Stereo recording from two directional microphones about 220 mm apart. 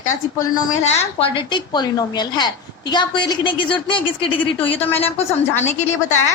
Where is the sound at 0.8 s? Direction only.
30° left (ahead or behind).